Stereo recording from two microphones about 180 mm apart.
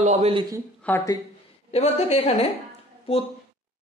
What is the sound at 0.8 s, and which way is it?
Speech, 10° left (ahead or behind).